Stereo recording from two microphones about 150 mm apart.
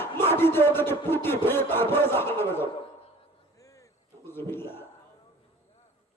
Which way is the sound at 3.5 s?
20° left (ahead or behind).